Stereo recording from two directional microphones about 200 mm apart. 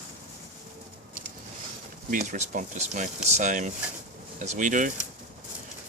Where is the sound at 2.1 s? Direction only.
40° right (ahead or behind).